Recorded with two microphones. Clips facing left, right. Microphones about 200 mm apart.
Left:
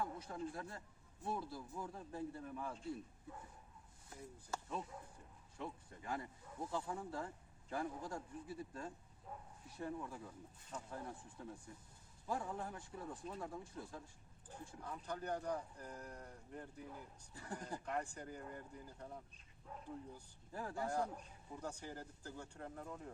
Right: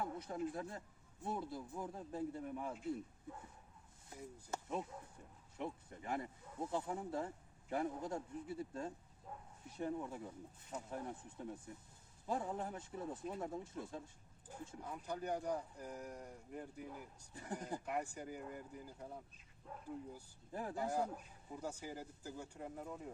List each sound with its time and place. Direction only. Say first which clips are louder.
0.0 s speech: right 2 dB; 20° right (ahead or behind)
4.1 s speech: right 2 dB; 20° right (ahead or behind)
14.8 s speech: right 1 dB; 10° right (ahead or behind)
17.8 s speech: right 1 dB; 10° right (ahead or behind)
20.5 s speech: right 2 dB; 20° right (ahead or behind)
21.5 s speech: right 2 dB; 10° right (ahead or behind)